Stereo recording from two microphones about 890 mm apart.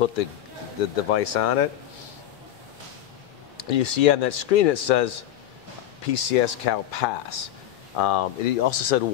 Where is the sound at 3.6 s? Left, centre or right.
Left.